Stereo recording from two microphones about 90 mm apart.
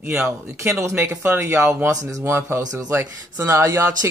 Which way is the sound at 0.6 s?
35° right (ahead or behind).